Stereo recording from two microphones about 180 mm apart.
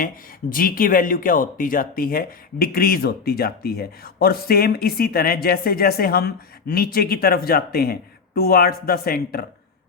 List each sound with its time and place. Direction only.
0.5 s speech: 50° left (ahead or behind)